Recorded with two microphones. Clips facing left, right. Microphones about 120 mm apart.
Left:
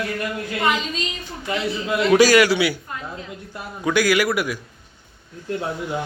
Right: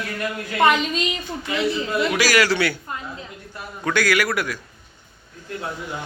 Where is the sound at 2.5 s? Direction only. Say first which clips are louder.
Left 2 dB; 10° left (ahead or behind).